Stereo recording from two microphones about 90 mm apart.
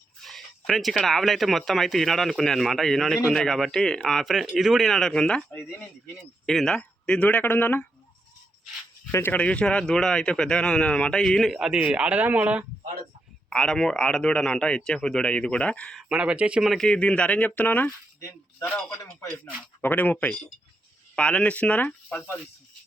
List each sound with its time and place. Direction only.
0.2 s speech: centre (ahead or behind)
6.4 s a man's voice: 5° left (ahead or behind); by 7.9 s 20° left (ahead or behind)
9.1 s a man's voice: 20° left (ahead or behind); by 11.5 s 5° left (ahead or behind)
11.5 s speech: 10° right (ahead or behind)
13.5 s a man's voice: 10° left (ahead or behind)
16.0 s speech: 10° right (ahead or behind)
16.6 s a man's voice: 5° left (ahead or behind)